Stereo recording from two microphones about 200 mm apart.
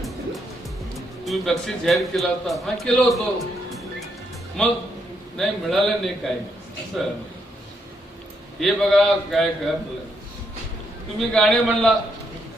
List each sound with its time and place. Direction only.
1.2 s a man's voice: centre (ahead or behind)
8.6 s a man's voice: centre (ahead or behind)
11.2 s a man's voice: centre (ahead or behind)